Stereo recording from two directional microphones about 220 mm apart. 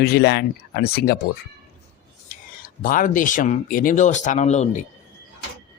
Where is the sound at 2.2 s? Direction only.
40° left (ahead or behind).